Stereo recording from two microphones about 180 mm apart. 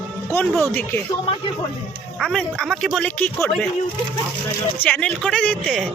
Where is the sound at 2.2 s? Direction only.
Centre (ahead or behind).